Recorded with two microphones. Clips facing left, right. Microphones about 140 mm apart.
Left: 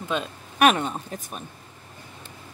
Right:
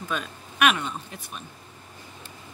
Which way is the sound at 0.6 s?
40° left (ahead or behind).